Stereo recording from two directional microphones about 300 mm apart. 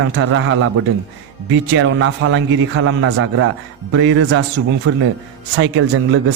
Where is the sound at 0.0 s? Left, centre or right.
Right.